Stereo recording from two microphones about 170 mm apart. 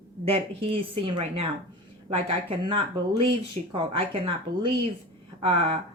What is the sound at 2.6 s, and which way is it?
A woman's voice, 30° right (ahead or behind).